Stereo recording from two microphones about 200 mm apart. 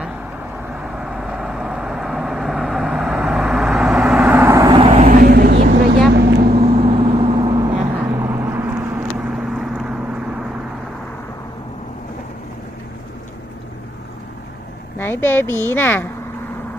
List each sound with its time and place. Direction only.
0.9 s vehicle: 5° right (ahead or behind)
4.8 s a sound: 30° right (ahead or behind)
5.2 s vehicle: 55° right (ahead or behind)
6.6 s vehicle: 30° right (ahead or behind); by 10.0 s 5° right (ahead or behind)
14.9 s a sound: 10° left (ahead or behind)
15.7 s speech: 10° left (ahead or behind)